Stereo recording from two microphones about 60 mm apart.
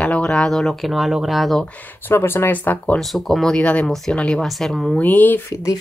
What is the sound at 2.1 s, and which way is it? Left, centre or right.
Speech, left.